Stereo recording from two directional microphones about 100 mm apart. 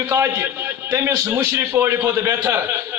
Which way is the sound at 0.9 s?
35° right (ahead or behind).